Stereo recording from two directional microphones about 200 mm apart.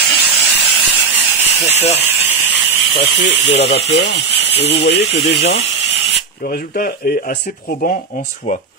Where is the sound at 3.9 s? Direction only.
55° left (ahead or behind).